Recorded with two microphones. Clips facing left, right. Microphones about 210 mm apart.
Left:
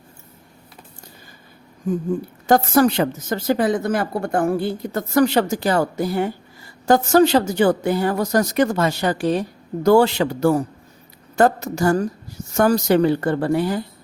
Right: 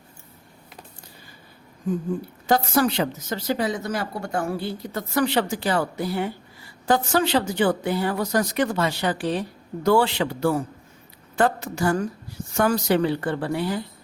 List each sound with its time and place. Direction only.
2.5 s a woman's voice: 50° left (ahead or behind)